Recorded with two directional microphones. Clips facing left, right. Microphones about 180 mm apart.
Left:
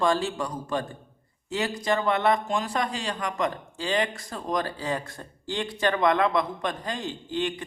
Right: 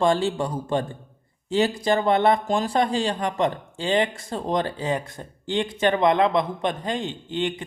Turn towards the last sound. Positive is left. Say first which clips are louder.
# right 2 dB
turn(degrees=-20)  # may be behind; listen again after turning